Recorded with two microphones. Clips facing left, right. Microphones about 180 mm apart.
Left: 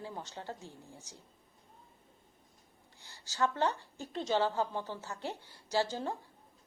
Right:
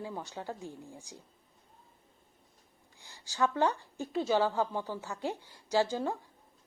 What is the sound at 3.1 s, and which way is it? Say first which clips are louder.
A woman's voice: right 2 dB; 15° right (ahead or behind).